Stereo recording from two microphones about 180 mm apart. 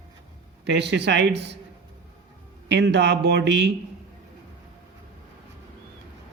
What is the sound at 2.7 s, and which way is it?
Speech, 75° right (ahead or behind).